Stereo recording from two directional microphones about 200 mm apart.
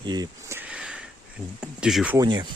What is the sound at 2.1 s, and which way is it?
Speech, 20° right (ahead or behind).